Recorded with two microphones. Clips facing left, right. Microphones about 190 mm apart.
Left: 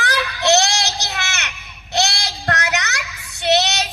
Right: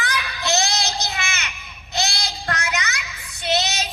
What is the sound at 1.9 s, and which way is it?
Child singing, 70° left (ahead or behind).